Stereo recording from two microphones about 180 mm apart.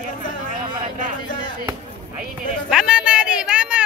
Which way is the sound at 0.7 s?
50° right (ahead or behind).